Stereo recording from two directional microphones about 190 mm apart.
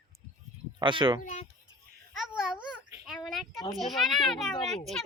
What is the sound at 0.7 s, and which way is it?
Speech, 25° right (ahead or behind).